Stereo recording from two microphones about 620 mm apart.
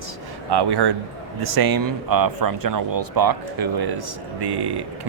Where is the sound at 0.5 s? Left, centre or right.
Right.